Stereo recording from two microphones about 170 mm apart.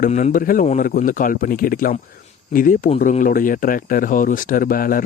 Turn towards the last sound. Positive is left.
turn(degrees=55)  # may be behind; listen again after turning